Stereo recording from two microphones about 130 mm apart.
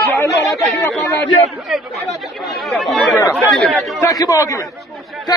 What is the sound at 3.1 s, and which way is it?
Speech, 20° left (ahead or behind).